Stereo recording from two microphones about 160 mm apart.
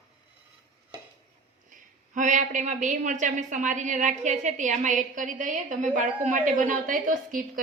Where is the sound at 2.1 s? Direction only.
50° right (ahead or behind).